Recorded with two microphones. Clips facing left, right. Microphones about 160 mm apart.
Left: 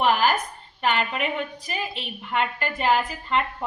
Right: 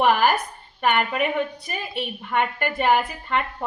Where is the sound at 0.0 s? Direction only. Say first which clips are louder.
Right 2 dB; 55° right (ahead or behind).